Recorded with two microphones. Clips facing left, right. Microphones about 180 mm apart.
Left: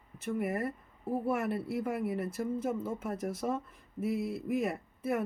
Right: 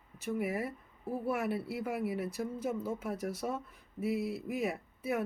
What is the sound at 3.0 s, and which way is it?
Speech, 5° right (ahead or behind).